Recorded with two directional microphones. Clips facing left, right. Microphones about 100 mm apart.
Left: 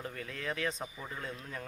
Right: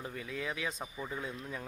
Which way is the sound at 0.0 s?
5° right (ahead or behind).